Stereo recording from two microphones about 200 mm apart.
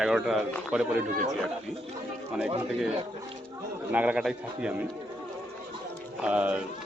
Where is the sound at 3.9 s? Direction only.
5° right (ahead or behind).